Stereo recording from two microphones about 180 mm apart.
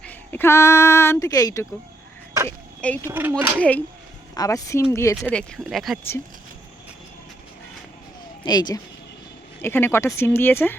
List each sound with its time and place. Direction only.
0.0 s speech: 10° left (ahead or behind)
2.5 s a sound: 10° left (ahead or behind)
3.0 s speech: 10° right (ahead or behind)
3.6 s speech: 10° left (ahead or behind)
4.4 s speech: 20° left (ahead or behind)
5.3 s speech: 5° left (ahead or behind)
8.4 s speech: 25° left (ahead or behind)
9.6 s speech: 10° left (ahead or behind)